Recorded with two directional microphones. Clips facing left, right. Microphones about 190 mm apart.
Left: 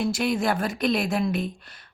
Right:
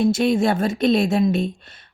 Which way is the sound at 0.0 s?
25° right (ahead or behind).